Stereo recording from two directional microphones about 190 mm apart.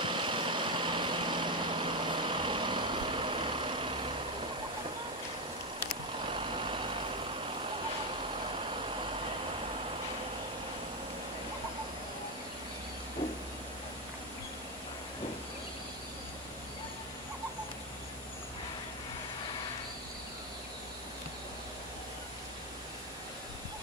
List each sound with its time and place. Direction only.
0.0 s vehicle: 25° right (ahead or behind)
6.3 s vehicle: 25° right (ahead or behind)